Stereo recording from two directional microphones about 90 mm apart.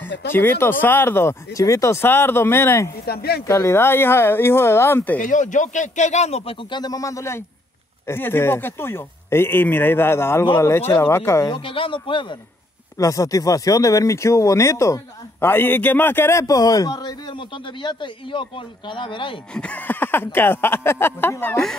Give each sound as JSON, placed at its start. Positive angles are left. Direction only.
{"t": 0.0, "sound": "speech", "side_deg": 20}
{"t": 1.5, "sound": "speech", "side_deg": 40}
{"t": 6.4, "sound": "speech", "side_deg": 80}
{"t": 6.8, "sound": "speech", "side_deg": 40}
{"t": 11.5, "sound": "speech", "side_deg": 85}
{"t": 12.9, "sound": "a man's voice", "side_deg": 40}
{"t": 19.5, "sound": "speech", "side_deg": 15}